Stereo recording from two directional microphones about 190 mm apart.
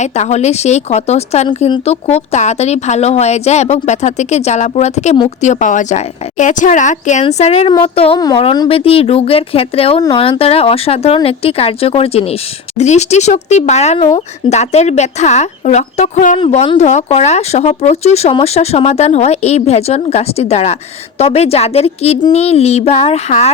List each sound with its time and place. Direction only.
0.0 s speech: 35° left (ahead or behind)
8.2 s a woman's voice: 20° left (ahead or behind)